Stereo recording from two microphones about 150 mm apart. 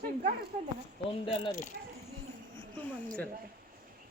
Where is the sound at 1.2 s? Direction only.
35° left (ahead or behind).